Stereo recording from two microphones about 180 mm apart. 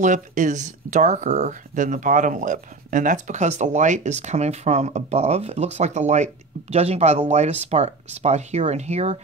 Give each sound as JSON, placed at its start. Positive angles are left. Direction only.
{"t": 0.0, "sound": "speech", "side_deg": -45}